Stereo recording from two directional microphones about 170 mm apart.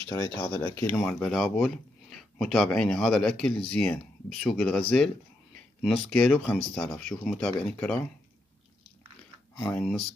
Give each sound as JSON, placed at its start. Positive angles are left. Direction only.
{"t": 0.1, "sound": "speech", "side_deg": 15}
{"t": 9.6, "sound": "speech", "side_deg": 5}